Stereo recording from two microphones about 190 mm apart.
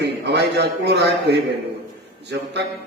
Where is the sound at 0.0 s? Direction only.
60° right (ahead or behind).